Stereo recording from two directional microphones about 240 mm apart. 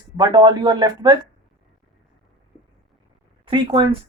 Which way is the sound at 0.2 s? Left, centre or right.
Centre.